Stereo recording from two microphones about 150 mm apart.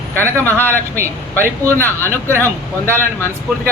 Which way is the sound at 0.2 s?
10° left (ahead or behind).